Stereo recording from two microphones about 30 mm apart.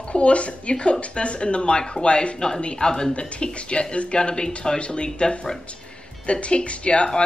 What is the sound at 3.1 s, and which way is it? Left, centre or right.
Speech, left.